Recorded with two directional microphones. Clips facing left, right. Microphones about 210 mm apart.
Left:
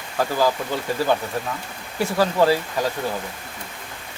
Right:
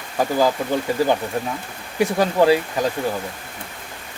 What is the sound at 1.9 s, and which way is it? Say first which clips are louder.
Speech: right 2 dB; 15° right (ahead or behind).